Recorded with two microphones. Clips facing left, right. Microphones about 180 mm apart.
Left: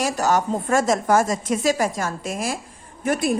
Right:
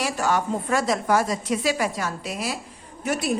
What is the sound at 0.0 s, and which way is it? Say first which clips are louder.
A woman's voice: left 3 dB; 40° left (ahead or behind).